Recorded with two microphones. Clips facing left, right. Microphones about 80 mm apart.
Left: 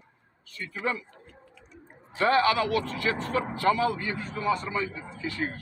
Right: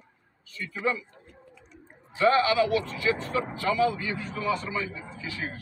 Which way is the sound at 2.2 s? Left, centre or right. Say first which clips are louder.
Right 1 dB; left.